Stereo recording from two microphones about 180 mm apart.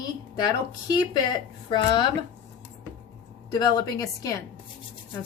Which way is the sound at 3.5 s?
25° left (ahead or behind).